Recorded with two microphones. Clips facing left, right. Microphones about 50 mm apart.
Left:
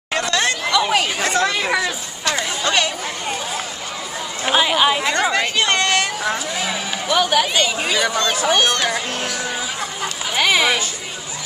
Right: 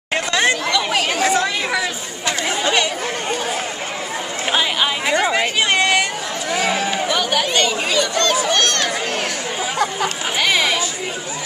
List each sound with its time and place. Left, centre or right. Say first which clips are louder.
0.1 s chatter: right 2 dB; centre
0.7 s chatter: left 2 dB; centre
1.2 s speech: right 1 dB; centre
4.5 s chatter: left 3 dB; centre
5.0 s a sound: right 1 dB; centre
7.1 s speech: left 2 dB; centre
10.3 s a sound: left 3 dB; centre